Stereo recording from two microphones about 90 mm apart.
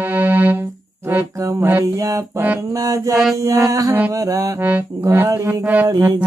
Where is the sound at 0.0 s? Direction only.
20° right (ahead or behind).